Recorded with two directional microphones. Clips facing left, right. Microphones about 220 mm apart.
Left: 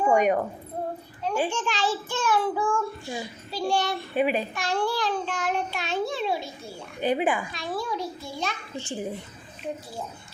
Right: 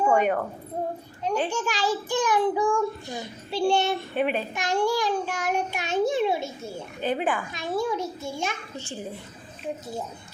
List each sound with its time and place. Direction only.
0.0 s a woman's voice: 10° left (ahead or behind)
1.6 s a child's voice: 10° right (ahead or behind); by 3.9 s 25° right (ahead or behind)
4.1 s a child's voice: 5° left (ahead or behind)
4.5 s a child's voice: 15° right (ahead or behind)
7.0 s a child's voice: 10° left (ahead or behind)
7.5 s a child's voice: 20° right (ahead or behind)
8.7 s a child's voice: 15° left (ahead or behind)